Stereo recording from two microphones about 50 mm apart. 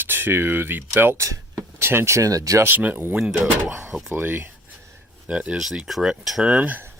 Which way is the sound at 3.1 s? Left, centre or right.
Centre.